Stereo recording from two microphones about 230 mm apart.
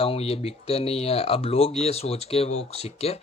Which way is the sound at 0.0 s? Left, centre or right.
Left.